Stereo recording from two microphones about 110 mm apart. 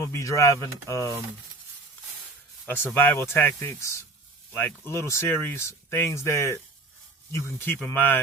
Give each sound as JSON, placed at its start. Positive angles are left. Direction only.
{"t": 0.0, "sound": "speech", "side_deg": 30}
{"t": 2.6, "sound": "speech", "side_deg": 15}